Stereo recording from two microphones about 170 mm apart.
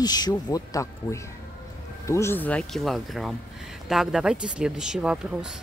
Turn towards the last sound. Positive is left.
turn(degrees=-5)  # may be behind; listen again after turning